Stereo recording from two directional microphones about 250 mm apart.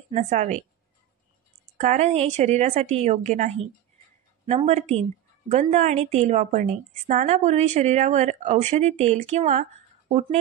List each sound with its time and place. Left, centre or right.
0.1 s a woman's voice: right
1.8 s a woman's voice: right